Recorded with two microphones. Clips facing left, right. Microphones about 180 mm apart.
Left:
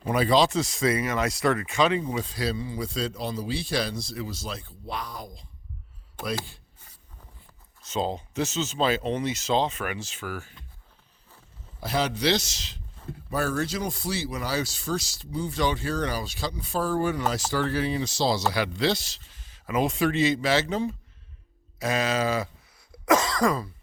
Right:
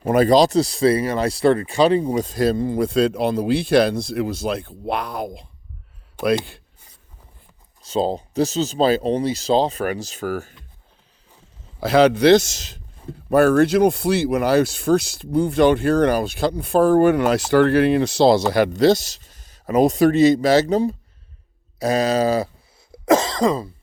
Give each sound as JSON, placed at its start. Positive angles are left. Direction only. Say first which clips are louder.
{"t": 0.0, "sound": "speech", "louder": "right 7 dB", "side_deg": -45}
{"t": 7.8, "sound": "speech", "louder": "right 7 dB", "side_deg": -35}
{"t": 11.8, "sound": "speech", "louder": "right 12 dB", "side_deg": -75}
{"t": 13.3, "sound": "speech", "louder": "right 13 dB", "side_deg": -60}
{"t": 22.9, "sound": "cough", "louder": "right 5 dB", "side_deg": -25}